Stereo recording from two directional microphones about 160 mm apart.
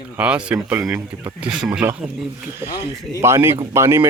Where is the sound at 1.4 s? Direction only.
5° right (ahead or behind).